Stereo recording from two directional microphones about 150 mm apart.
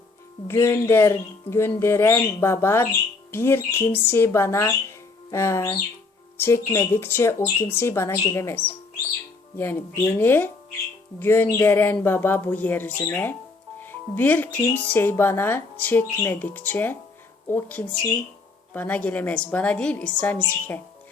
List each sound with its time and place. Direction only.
0.4 s speech: 15° left (ahead or behind)